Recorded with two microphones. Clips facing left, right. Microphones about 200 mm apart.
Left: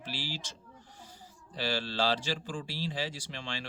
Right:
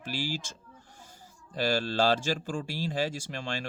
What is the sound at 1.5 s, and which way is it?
Speech, 45° right (ahead or behind).